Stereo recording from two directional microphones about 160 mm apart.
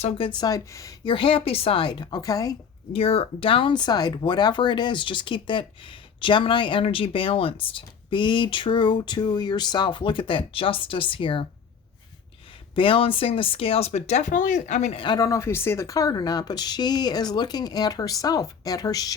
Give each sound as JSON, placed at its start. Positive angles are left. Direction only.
{"t": 0.3, "sound": "speech", "side_deg": 25}
{"t": 2.9, "sound": "speech", "side_deg": 35}
{"t": 12.7, "sound": "speech", "side_deg": 35}
{"t": 15.0, "sound": "speech", "side_deg": 25}